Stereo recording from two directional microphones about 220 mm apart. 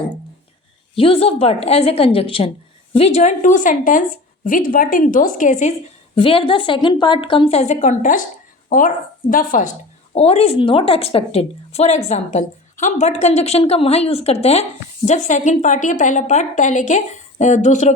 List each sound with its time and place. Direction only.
0.9 s a woman's voice: 25° left (ahead or behind)
6.1 s a woman's voice: 25° left (ahead or behind)
10.2 s a woman's voice: 25° left (ahead or behind)